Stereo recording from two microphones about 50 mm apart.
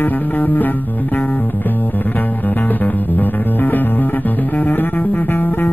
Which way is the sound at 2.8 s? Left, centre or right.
Left.